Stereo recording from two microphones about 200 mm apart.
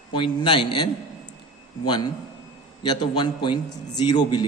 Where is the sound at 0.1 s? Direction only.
25° left (ahead or behind).